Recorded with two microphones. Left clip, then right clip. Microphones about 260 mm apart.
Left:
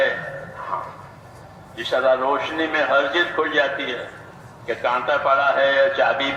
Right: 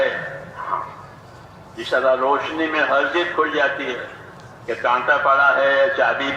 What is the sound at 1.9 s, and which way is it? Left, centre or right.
A man's voice, left.